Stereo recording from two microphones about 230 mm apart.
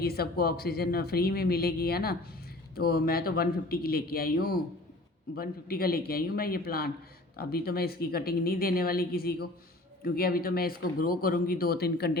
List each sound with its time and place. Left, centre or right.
0.0 s speech: left